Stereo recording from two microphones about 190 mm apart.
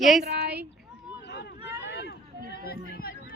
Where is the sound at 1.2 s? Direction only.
65° left (ahead or behind).